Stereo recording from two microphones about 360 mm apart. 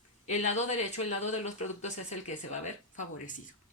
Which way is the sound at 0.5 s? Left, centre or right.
Centre.